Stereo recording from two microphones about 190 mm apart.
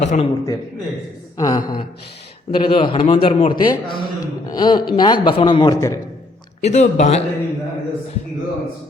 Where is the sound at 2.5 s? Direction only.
25° left (ahead or behind).